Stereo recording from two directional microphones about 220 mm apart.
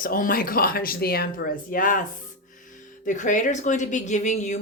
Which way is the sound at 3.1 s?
35° left (ahead or behind).